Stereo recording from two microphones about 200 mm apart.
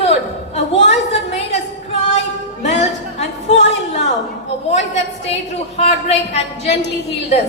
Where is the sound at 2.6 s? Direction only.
35° left (ahead or behind).